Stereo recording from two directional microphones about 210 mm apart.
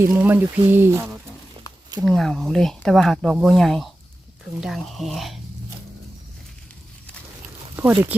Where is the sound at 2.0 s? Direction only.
Centre (ahead or behind).